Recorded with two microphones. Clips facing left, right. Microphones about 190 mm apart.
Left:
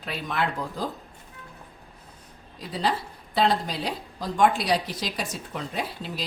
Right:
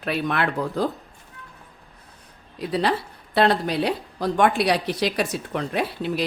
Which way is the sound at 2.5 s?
65° right (ahead or behind).